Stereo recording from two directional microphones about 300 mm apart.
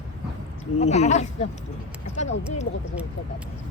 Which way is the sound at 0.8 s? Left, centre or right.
Left.